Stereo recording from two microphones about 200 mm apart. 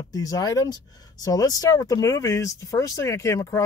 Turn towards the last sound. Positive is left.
turn(degrees=15)  # may be behind; listen again after turning